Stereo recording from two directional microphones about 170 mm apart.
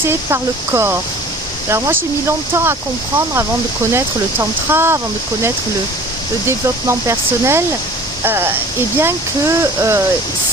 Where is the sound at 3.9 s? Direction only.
15° right (ahead or behind).